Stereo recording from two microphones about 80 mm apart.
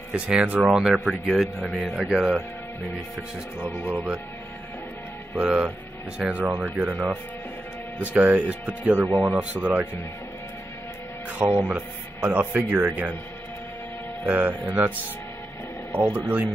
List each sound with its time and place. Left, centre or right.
0.1 s speech: centre
1.0 s speech: centre
5.4 s speech: centre
11.3 s speech: right
14.2 s speech: right
16.0 s speech: right